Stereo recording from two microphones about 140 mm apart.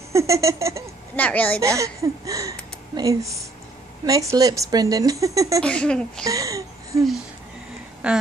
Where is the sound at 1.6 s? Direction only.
25° right (ahead or behind).